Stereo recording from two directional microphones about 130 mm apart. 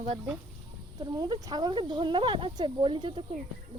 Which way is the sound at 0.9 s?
30° right (ahead or behind).